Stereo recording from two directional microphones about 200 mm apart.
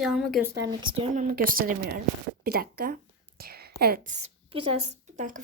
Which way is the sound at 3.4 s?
50° right (ahead or behind).